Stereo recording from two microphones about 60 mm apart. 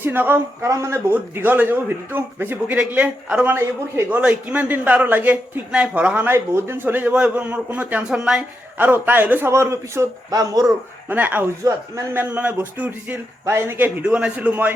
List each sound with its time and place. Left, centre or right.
0.0 s a man's voice: right
1.1 s a man's voice: right
2.7 s a man's voice: right
6.2 s a man's voice: right
7.1 s a man's voice: right
8.8 s a man's voice: right
9.5 s speech: right
10.3 s speech: right
11.1 s a man's voice: right
11.6 s speech: right
12.3 s a man's voice: right
13.4 s speech: right
14.1 s a man's voice: right